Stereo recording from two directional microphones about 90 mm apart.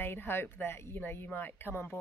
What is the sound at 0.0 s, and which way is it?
Speech, 25° left (ahead or behind).